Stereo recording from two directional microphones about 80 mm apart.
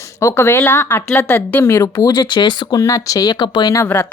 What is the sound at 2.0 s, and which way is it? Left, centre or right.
Speech, left.